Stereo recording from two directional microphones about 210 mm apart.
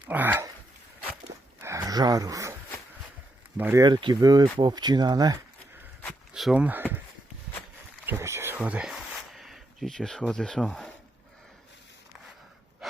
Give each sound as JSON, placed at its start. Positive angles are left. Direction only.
{"t": 0.1, "sound": "speech", "side_deg": -10}
{"t": 1.6, "sound": "a sound", "side_deg": -15}
{"t": 3.6, "sound": "speech", "side_deg": -15}
{"t": 6.0, "sound": "walk", "side_deg": 0}
{"t": 8.0, "sound": "a sound", "side_deg": -10}
{"t": 12.8, "sound": "breathing", "side_deg": 0}